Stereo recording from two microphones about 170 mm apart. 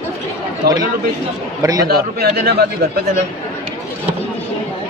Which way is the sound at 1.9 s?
65° right (ahead or behind).